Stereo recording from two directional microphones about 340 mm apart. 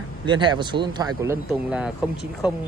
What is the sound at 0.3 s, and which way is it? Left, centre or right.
Speech, centre.